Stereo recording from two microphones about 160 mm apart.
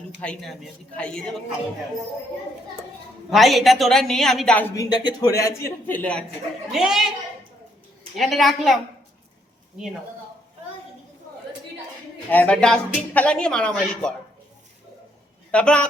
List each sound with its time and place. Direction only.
0.2 s speech: 5° left (ahead or behind)
3.2 s speech: centre (ahead or behind)
4.7 s speech: 25° left (ahead or behind); by 6.2 s 10° left (ahead or behind)
6.7 s speech: 5° right (ahead or behind)
8.1 s speech: centre (ahead or behind)
12.3 s speech: 10° left (ahead or behind)
15.5 s a man's voice: 5° left (ahead or behind)